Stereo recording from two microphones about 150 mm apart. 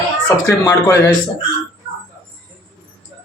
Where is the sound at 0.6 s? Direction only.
20° left (ahead or behind).